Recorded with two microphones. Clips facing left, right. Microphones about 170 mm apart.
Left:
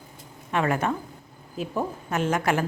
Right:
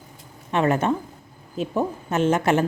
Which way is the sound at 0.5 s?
25° right (ahead or behind).